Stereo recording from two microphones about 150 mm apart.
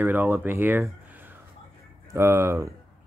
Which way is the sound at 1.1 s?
15° right (ahead or behind).